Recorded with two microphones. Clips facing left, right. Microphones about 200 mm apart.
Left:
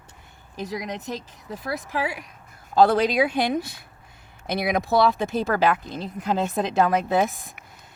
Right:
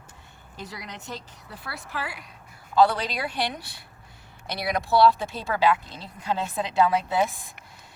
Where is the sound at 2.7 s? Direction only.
50° left (ahead or behind).